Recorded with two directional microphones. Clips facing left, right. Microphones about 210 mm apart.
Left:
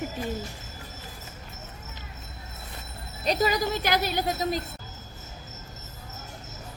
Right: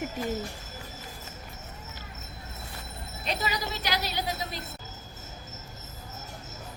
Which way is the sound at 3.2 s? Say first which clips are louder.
Left 8 dB; 40° left (ahead or behind).